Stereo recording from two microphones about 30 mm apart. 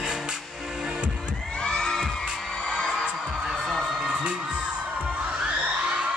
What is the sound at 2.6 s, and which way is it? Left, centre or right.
Music, left.